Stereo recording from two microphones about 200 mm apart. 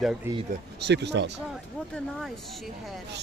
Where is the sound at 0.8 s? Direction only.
60° right (ahead or behind).